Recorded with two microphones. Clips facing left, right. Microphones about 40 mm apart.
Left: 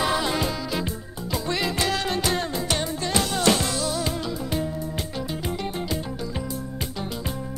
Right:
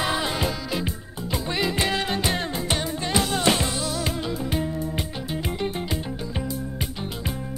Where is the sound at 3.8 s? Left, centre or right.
Centre.